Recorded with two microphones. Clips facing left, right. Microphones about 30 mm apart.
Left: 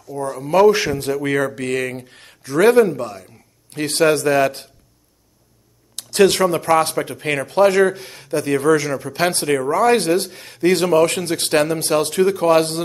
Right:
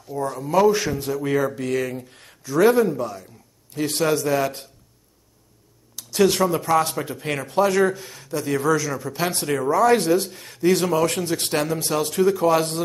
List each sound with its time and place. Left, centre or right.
0.1 s speech: left
0.5 s speech: left
2.0 s speech: left
5.9 s a sound: left
6.4 s speech: left